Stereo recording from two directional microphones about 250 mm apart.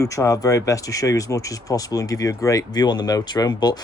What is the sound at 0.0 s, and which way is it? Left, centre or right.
Speech, centre.